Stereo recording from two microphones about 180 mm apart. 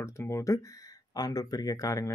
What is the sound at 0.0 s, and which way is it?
Speech, 15° left (ahead or behind).